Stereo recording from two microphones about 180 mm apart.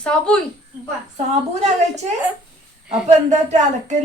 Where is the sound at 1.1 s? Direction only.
40° right (ahead or behind).